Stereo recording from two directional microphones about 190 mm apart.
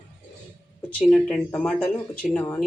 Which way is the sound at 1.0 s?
5° left (ahead or behind).